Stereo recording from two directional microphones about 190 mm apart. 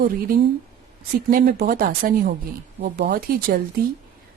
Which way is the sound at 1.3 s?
50° right (ahead or behind).